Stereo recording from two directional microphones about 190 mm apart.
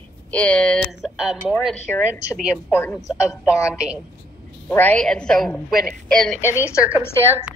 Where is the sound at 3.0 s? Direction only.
15° left (ahead or behind).